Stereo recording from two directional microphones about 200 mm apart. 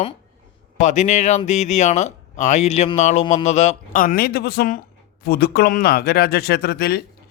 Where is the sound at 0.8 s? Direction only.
35° left (ahead or behind).